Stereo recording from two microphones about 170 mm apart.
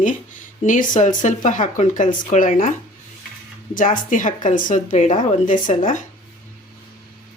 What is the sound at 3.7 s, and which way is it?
Speech, 50° left (ahead or behind).